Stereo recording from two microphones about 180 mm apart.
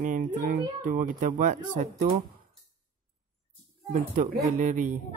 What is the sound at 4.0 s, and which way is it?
Speech, 50° right (ahead or behind).